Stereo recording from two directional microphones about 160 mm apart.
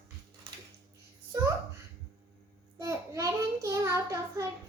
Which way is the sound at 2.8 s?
20° right (ahead or behind).